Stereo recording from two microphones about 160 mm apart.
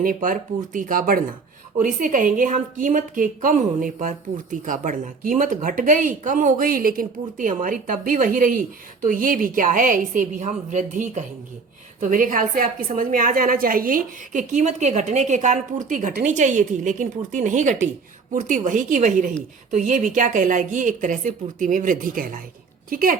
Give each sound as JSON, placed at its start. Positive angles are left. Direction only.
{"t": 0.0, "sound": "a woman's voice", "side_deg": -60}